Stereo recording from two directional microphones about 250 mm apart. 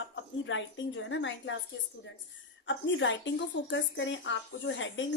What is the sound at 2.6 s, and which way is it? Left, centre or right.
A woman's voice, left.